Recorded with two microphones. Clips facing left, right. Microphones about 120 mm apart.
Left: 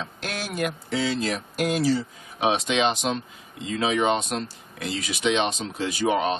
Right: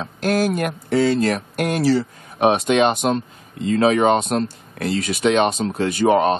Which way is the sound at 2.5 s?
50° right (ahead or behind).